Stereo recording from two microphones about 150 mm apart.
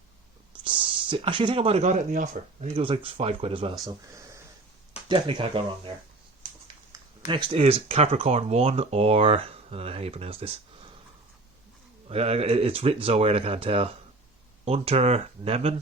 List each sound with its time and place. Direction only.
0.6 s speech: 35° right (ahead or behind)
3.8 s speech: 20° right (ahead or behind)
5.0 s speech: 30° right (ahead or behind)
7.3 s speech: 30° right (ahead or behind)
12.0 s speech: 45° right (ahead or behind)